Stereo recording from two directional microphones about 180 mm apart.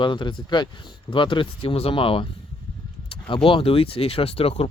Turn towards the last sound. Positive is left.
turn(degrees=30)  # may be behind; listen again after turning